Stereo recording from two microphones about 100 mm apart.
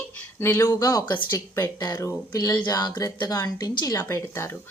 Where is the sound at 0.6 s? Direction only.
35° left (ahead or behind).